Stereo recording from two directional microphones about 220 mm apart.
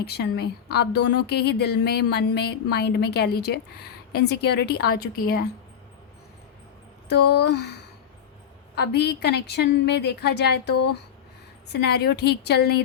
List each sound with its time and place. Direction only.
0.0 s speech: 45° left (ahead or behind)
7.1 s speech: 50° left (ahead or behind)
8.7 s speech: 50° left (ahead or behind)